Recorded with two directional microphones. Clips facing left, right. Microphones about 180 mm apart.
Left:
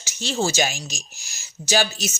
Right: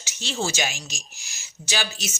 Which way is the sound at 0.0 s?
40° left (ahead or behind).